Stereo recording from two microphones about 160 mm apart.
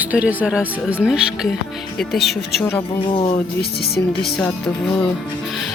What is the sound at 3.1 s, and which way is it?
Speech, 35° left (ahead or behind).